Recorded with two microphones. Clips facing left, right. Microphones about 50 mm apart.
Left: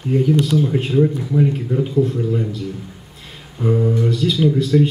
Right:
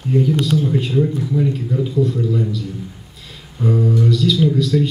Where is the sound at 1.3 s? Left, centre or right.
Left.